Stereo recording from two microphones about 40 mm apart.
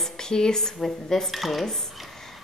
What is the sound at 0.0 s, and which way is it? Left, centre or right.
Speech, centre.